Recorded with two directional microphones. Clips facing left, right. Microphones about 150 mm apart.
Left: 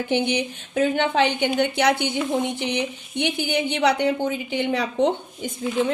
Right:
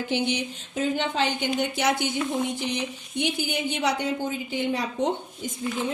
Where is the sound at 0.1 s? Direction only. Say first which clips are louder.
Left 5 dB; 60° left (ahead or behind).